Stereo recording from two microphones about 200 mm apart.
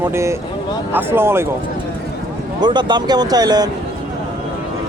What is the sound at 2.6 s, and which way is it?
Speech, 20° right (ahead or behind).